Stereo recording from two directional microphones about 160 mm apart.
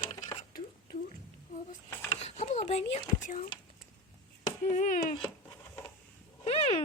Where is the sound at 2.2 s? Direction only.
45° left (ahead or behind).